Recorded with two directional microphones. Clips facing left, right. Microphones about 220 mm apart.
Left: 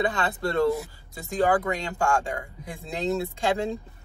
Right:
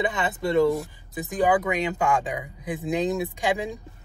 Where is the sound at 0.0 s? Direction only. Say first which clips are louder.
Even; 20° right (ahead or behind).